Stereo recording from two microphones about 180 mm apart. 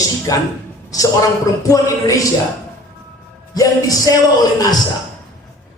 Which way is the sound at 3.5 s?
20° left (ahead or behind).